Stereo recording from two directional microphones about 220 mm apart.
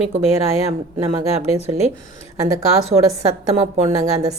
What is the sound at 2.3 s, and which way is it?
Speech, 15° right (ahead or behind).